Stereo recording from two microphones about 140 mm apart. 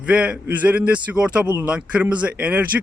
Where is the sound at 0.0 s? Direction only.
5° right (ahead or behind).